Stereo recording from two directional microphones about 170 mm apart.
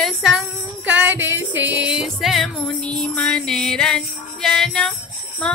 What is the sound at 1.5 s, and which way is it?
Music, 90° right.